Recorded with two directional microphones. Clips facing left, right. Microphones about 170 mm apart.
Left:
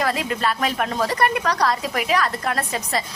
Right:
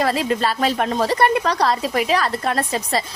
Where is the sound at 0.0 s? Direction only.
30° right (ahead or behind).